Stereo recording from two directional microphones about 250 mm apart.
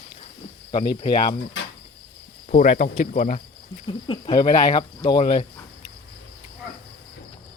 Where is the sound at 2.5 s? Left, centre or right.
Left.